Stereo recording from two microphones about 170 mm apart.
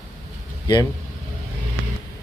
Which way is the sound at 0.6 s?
25° left (ahead or behind).